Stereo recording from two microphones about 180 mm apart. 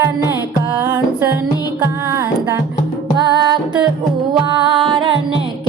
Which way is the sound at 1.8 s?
15° right (ahead or behind).